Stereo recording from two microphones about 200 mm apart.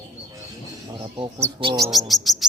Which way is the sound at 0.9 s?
25° right (ahead or behind).